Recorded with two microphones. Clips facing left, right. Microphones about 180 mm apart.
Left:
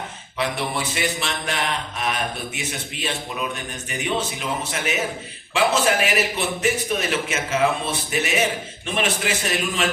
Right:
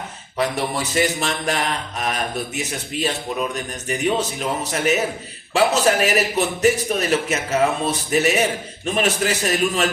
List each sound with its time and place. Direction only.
0.3 s a man's voice: 40° right (ahead or behind)